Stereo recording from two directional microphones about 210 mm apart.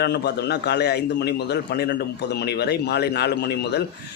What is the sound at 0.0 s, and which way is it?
A man's voice, 50° left (ahead or behind).